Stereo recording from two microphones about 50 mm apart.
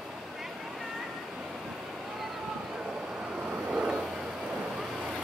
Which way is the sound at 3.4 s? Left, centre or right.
Right.